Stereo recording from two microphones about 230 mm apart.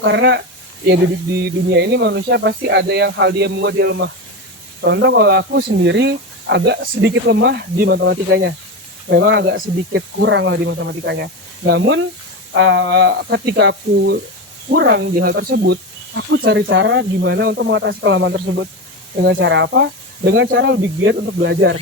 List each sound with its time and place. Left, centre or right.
0.0 s speech: right
1.5 s speech: right